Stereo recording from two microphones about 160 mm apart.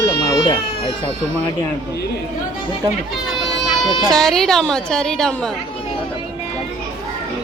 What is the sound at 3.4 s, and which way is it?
Speech, centre (ahead or behind).